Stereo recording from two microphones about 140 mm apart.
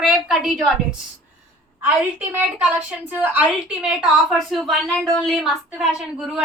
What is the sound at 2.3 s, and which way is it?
A woman's voice, 10° right (ahead or behind).